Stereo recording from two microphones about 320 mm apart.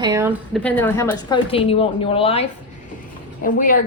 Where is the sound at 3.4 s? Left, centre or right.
Left.